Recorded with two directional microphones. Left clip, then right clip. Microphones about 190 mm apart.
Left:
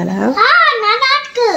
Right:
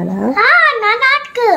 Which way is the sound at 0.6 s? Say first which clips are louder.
Even; 15° right (ahead or behind).